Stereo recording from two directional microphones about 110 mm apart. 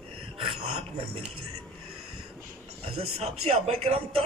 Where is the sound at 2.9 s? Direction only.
65° right (ahead or behind).